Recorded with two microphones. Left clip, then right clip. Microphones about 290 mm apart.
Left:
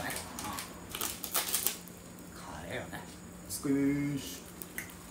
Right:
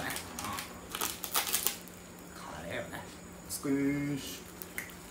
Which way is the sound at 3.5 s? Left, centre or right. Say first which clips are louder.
Left 1 dB; centre.